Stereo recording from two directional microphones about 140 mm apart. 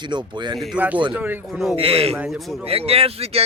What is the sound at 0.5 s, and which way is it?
Speech, 10° right (ahead or behind).